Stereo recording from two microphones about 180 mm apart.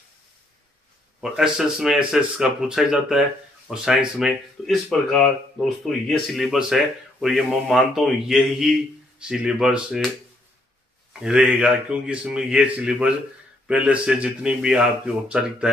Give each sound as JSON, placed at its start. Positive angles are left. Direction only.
{"t": 1.2, "sound": "speech", "side_deg": -5}
{"t": 11.1, "sound": "speech", "side_deg": -5}